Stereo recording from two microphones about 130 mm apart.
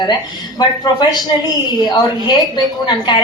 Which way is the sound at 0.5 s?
35° left (ahead or behind).